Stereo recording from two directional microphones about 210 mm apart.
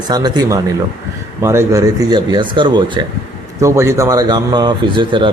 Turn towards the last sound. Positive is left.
turn(degrees=-25)  # may be behind; listen again after turning